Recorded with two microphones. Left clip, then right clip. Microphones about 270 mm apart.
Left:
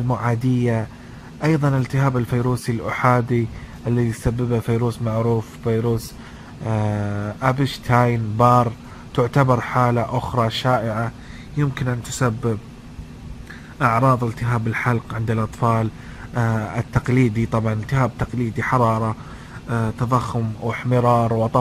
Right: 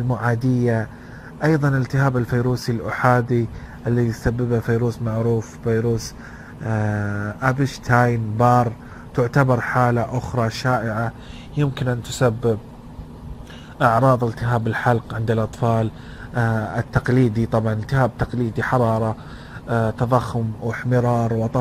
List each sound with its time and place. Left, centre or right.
0.1 s speech: centre
1.4 s speech: centre
11.9 s a man's voice: centre
13.8 s a man's voice: centre
15.3 s speech: centre
17.1 s a man's voice: right
17.5 s speech: centre
19.7 s a man's voice: centre
20.1 s speech: centre